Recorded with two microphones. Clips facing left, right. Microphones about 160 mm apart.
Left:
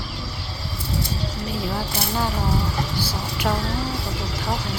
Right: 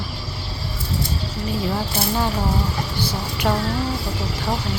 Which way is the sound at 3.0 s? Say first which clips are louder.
Right 2 dB; 10° left (ahead or behind).